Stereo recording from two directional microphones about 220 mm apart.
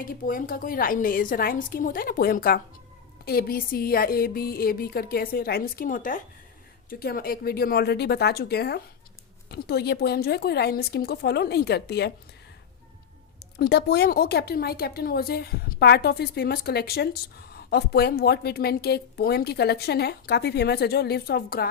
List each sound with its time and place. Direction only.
0.0 s a woman's voice: 40° left (ahead or behind)
13.4 s a woman's voice: 50° left (ahead or behind)